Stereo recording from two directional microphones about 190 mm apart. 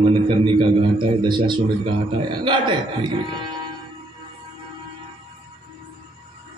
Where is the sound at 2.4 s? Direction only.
25° right (ahead or behind).